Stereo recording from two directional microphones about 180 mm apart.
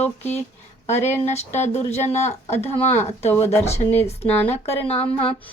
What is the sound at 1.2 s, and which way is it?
Speech, 40° left (ahead or behind).